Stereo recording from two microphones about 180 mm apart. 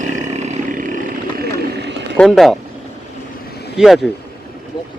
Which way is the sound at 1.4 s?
60° right (ahead or behind).